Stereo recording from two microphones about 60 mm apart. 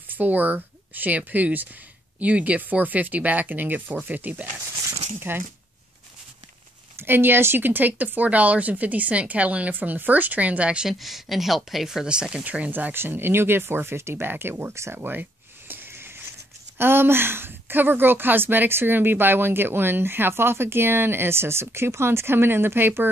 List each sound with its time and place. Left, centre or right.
0.1 s speech: right
7.0 s speech: right; by 10.9 s centre
10.9 s speech: centre; by 12.9 s right
12.9 s speech: right
15.7 s speech: right